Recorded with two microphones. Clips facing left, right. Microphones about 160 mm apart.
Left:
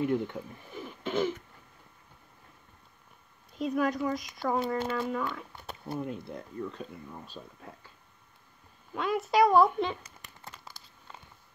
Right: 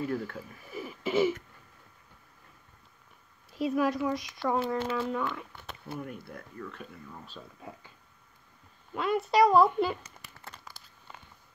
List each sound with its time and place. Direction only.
0.0 s speech: 20° left (ahead or behind)
0.4 s speech: 5° right (ahead or behind)
3.5 s speech: centre (ahead or behind)
5.9 s speech: 20° left (ahead or behind)
8.9 s speech: centre (ahead or behind)